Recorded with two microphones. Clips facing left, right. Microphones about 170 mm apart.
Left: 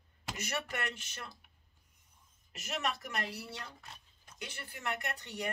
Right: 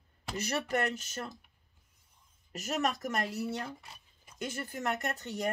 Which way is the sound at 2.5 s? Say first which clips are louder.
Right 5 dB; 40° right (ahead or behind).